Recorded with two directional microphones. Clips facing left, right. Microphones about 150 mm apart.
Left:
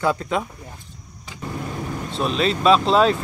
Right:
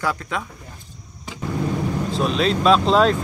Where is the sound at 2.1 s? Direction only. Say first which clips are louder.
Even; centre (ahead or behind).